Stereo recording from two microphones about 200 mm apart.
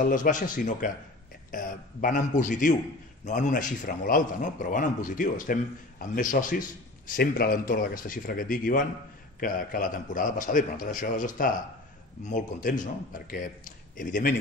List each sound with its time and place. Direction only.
0.1 s a man's voice: 40° left (ahead or behind)
13.9 s a man's voice: 40° left (ahead or behind)